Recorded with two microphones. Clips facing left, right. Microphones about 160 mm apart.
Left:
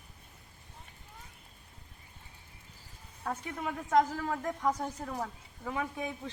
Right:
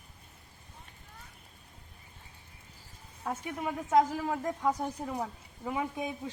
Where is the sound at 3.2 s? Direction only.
10° right (ahead or behind).